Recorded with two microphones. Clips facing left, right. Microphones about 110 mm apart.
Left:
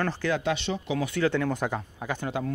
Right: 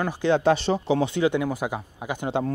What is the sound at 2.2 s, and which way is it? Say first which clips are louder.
Speech: right 6 dB; 30° right (ahead or behind).